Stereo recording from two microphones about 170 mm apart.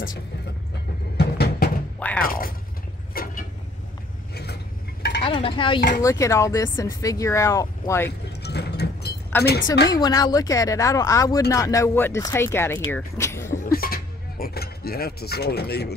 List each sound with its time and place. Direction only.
1.1 s music: 70° left (ahead or behind)
2.0 s speech: 10° left (ahead or behind)
2.2 s speech: 55° left (ahead or behind)
5.2 s speech: 30° left (ahead or behind)
5.8 s speech: 55° left (ahead or behind)
6.0 s speech: 20° left (ahead or behind)
8.4 s clip-clop: 75° left (ahead or behind)
9.4 s speech: 75° left (ahead or behind)
9.8 s speech: 20° left (ahead or behind)
13.7 s a sound: 60° left (ahead or behind)